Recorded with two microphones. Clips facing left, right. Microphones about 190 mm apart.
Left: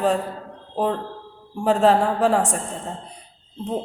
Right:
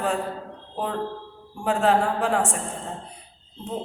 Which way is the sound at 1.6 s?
35° left (ahead or behind).